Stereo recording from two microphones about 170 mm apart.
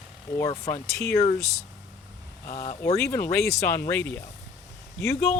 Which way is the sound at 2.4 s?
40° left (ahead or behind).